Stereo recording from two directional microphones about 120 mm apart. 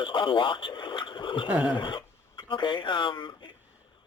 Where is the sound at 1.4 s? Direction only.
10° right (ahead or behind).